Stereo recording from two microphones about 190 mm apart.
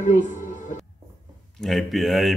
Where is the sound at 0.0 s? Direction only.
40° left (ahead or behind).